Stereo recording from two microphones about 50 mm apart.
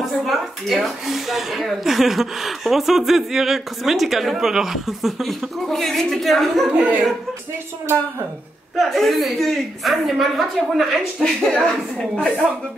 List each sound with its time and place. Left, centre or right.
0.0 s speech: centre
6.7 s speech: right
8.7 s speech: centre
11.6 s a woman's voice: centre